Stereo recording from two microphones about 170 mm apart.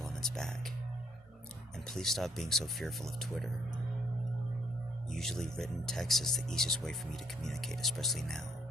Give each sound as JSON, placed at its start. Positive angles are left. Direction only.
{"t": 0.0, "sound": "speech", "side_deg": 0}
{"t": 1.7, "sound": "speech", "side_deg": 0}
{"t": 5.1, "sound": "speech", "side_deg": 0}